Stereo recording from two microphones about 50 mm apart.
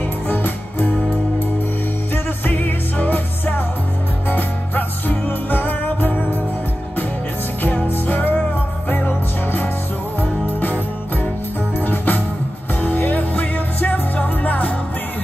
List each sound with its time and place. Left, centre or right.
0.3 s music: left
2.1 s music: left
7.6 s music: left